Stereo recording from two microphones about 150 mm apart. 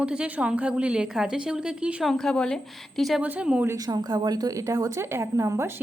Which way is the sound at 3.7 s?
25° right (ahead or behind).